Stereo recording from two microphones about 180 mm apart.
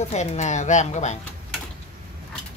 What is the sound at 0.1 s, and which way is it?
A woman's voice, 40° left (ahead or behind).